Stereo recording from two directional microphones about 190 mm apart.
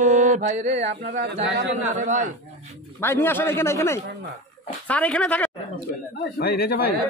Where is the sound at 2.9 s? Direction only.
10° left (ahead or behind).